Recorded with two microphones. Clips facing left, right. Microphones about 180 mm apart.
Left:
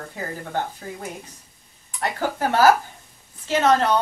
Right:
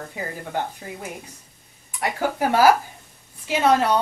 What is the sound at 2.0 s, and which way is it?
A woman's voice, 10° right (ahead or behind).